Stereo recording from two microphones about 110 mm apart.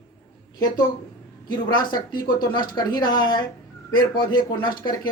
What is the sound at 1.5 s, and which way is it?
Speech, 45° left (ahead or behind).